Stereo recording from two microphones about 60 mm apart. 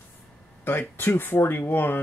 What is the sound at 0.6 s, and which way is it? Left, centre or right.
Speech, left.